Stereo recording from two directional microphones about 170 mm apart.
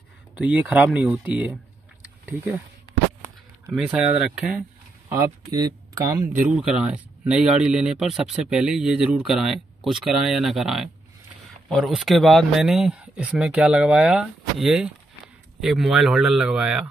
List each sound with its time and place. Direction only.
0.4 s speech: 5° right (ahead or behind)
3.6 s speech: 5° right (ahead or behind); by 6.1 s 20° right (ahead or behind)
6.5 s speech: 5° right (ahead or behind)